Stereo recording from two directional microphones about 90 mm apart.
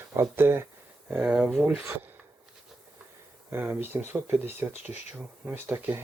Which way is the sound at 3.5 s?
25° right (ahead or behind).